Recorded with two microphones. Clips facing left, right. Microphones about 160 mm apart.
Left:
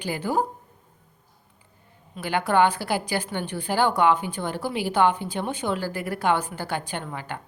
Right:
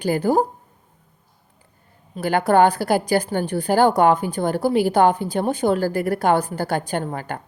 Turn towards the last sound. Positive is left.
turn(degrees=-45)  # may be behind; listen again after turning